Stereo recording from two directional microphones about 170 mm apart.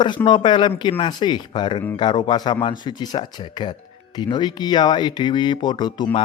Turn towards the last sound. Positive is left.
turn(degrees=25)  # may be behind; listen again after turning